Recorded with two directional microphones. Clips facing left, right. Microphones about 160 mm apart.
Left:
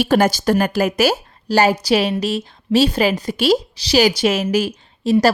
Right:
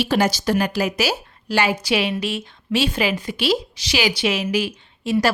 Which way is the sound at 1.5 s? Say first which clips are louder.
Left 5 dB; 40° left (ahead or behind).